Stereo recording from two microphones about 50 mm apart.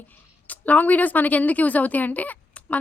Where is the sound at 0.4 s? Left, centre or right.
Left.